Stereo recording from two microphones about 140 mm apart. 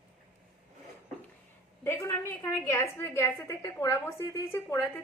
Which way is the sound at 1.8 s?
20° left (ahead or behind).